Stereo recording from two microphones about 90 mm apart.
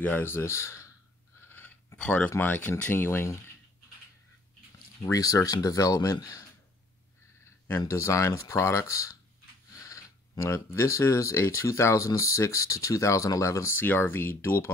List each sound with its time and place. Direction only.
0.0 s speech: 25° left (ahead or behind)
1.5 s a sound: 25° left (ahead or behind)
2.0 s speech: 15° left (ahead or behind)
5.1 s speech: 40° left (ahead or behind)
7.8 s speech: 35° left (ahead or behind)